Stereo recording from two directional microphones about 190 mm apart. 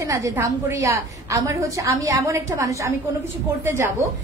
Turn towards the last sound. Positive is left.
turn(degrees=-15)  # may be behind; listen again after turning